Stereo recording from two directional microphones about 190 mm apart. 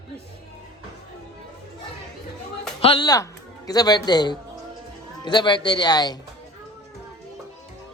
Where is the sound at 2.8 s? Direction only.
30° left (ahead or behind).